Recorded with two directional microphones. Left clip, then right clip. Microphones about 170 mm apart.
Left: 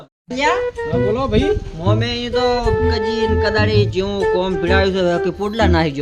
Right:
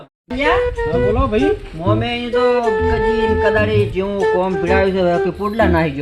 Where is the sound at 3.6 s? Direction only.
35° left (ahead or behind).